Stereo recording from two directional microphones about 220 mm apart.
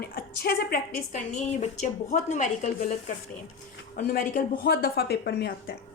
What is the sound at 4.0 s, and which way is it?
A woman's voice, 40° left (ahead or behind).